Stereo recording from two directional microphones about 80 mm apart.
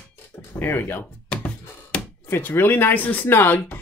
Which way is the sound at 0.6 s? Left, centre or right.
Left.